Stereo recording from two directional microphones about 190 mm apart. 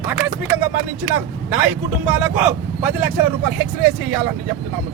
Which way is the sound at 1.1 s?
5° right (ahead or behind).